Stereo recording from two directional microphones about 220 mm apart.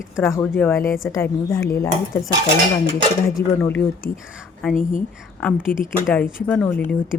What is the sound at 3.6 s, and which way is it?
Speech, 10° left (ahead or behind).